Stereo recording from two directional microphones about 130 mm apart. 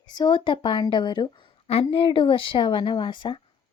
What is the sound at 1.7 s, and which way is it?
Speech, 45° left (ahead or behind).